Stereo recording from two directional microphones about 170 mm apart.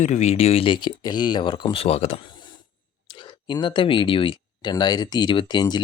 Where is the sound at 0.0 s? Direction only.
40° left (ahead or behind).